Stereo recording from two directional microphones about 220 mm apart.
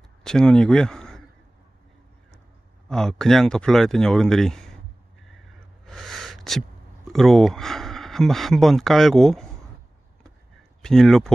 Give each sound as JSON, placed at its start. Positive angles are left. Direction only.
{"t": 0.2, "sound": "speech", "side_deg": 5}
{"t": 2.9, "sound": "speech", "side_deg": 0}
{"t": 5.9, "sound": "gasp", "side_deg": 0}
{"t": 7.1, "sound": "speech", "side_deg": 0}
{"t": 10.8, "sound": "speech", "side_deg": 0}